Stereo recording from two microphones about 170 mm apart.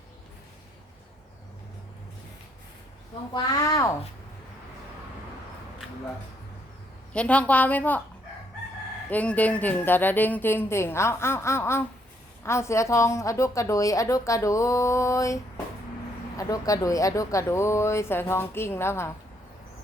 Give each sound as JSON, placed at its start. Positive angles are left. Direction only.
{"t": 3.3, "sound": "speech", "side_deg": 25}
{"t": 7.1, "sound": "a woman's voice", "side_deg": 5}
{"t": 9.0, "sound": "a woman's voice", "side_deg": 10}
{"t": 16.4, "sound": "a woman's voice", "side_deg": 20}